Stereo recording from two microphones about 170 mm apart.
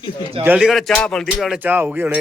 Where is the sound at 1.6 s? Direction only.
10° right (ahead or behind).